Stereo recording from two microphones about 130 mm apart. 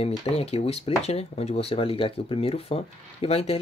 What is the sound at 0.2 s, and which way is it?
Speech, 50° left (ahead or behind).